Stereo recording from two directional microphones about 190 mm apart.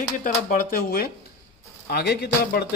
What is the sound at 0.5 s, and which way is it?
Speech, 50° left (ahead or behind).